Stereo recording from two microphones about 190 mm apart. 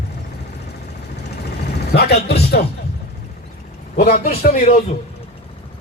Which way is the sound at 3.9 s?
55° left (ahead or behind).